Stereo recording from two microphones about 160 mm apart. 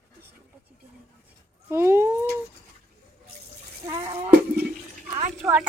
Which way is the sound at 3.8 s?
25° right (ahead or behind).